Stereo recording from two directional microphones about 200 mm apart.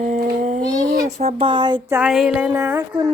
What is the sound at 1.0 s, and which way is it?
Speech, 35° right (ahead or behind).